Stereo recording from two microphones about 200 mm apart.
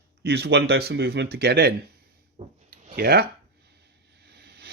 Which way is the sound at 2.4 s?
35° right (ahead or behind).